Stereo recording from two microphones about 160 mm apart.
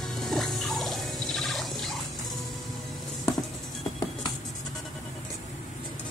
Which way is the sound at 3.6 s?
Centre (ahead or behind).